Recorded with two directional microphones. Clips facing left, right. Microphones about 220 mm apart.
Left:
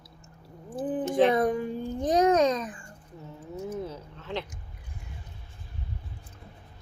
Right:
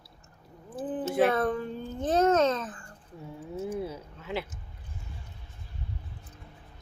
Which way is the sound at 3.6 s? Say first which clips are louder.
Even; 10° right (ahead or behind).